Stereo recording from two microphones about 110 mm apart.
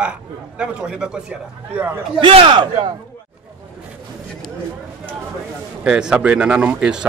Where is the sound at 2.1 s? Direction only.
50° right (ahead or behind).